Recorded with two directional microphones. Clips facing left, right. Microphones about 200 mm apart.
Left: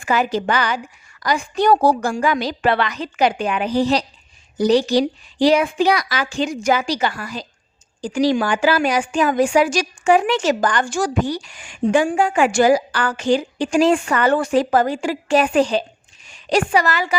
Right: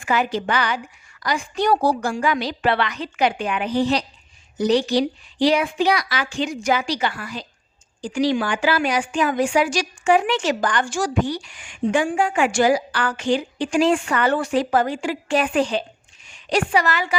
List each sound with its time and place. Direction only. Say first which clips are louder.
0.0 s a woman's voice: left 2 dB; 40° left (ahead or behind)